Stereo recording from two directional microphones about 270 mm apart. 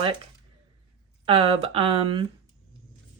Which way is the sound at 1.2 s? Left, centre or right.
Centre.